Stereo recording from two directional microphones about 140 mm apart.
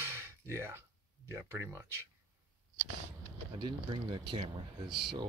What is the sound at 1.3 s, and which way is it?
Speech, 20° right (ahead or behind).